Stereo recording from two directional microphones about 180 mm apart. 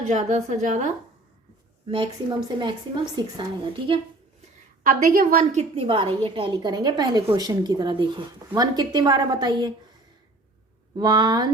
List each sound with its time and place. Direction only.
0.0 s a woman's voice: 40° right (ahead or behind)
2.6 s a woman's voice: 25° right (ahead or behind)
4.8 s a woman's voice: 50° right (ahead or behind); by 9.7 s 25° right (ahead or behind)
10.9 s a woman's voice: 25° right (ahead or behind)